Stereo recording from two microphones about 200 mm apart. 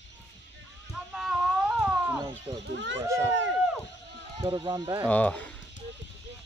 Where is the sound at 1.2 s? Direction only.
Centre (ahead or behind).